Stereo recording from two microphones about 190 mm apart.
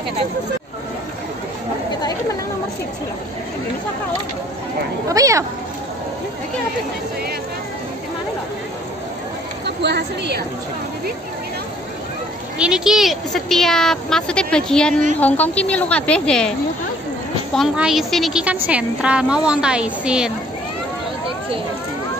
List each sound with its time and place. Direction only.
5.0 s speech: 15° right (ahead or behind)
9.8 s a woman's voice: 60° right (ahead or behind)
12.5 s a woman's voice: 5° right (ahead or behind)
17.6 s a woman's voice: centre (ahead or behind)